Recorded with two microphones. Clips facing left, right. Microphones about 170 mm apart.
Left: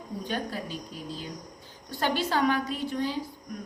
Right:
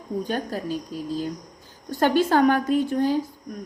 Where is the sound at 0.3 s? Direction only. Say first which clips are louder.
Right 5 dB; 45° right (ahead or behind).